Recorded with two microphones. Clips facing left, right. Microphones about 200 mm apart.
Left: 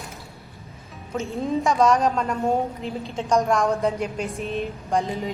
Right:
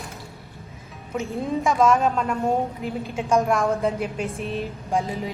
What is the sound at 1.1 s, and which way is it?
A woman's voice, centre (ahead or behind).